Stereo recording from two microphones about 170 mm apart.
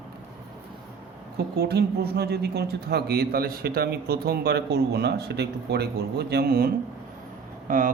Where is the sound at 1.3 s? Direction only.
70° right (ahead or behind).